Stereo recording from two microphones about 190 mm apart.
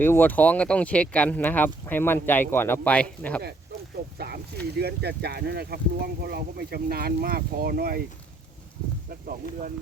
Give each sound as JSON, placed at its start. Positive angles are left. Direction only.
{"t": 0.0, "sound": "speech", "side_deg": 10}
{"t": 4.0, "sound": "a sound", "side_deg": -50}
{"t": 4.8, "sound": "speech", "side_deg": -55}
{"t": 9.0, "sound": "speech", "side_deg": -45}